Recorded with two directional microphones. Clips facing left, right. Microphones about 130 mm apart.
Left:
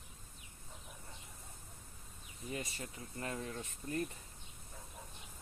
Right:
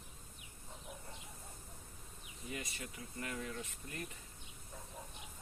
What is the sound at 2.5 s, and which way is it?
Speech, 30° left (ahead or behind).